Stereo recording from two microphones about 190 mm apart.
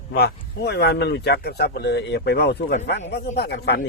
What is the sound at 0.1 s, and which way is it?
A man's voice, 55° left (ahead or behind).